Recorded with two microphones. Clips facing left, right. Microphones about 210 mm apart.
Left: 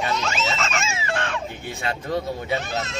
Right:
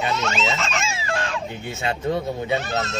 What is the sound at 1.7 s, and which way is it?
Speech, 25° right (ahead or behind).